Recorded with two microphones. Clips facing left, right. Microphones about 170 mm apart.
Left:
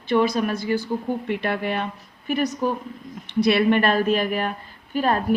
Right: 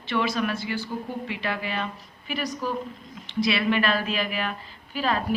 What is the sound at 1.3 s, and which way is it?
A woman's voice, 55° left (ahead or behind).